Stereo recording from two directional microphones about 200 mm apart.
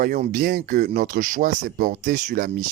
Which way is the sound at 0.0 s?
45° right (ahead or behind).